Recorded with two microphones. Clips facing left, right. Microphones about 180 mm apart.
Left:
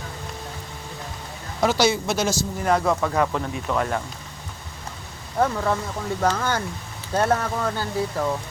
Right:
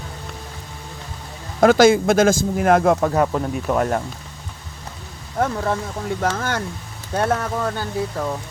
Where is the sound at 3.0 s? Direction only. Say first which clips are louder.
Right 4 dB; 30° right (ahead or behind).